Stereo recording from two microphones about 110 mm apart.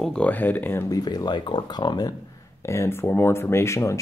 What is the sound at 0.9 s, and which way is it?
Speech, 35° left (ahead or behind).